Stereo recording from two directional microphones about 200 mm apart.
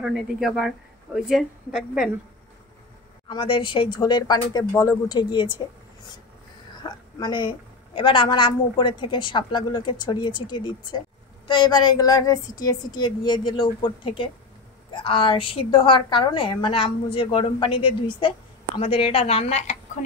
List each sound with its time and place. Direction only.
0.0 s a woman's voice: centre (ahead or behind)
3.3 s a woman's voice: 25° left (ahead or behind)
6.8 s a woman's voice: 20° left (ahead or behind)